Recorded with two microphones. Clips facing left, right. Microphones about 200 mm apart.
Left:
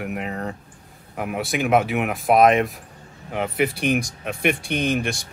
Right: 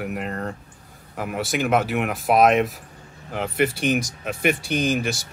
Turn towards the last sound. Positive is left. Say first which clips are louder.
# even
turn(degrees=-5)  # may be behind; listen again after turning